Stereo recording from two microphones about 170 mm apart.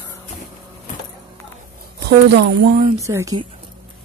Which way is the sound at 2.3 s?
70° right (ahead or behind).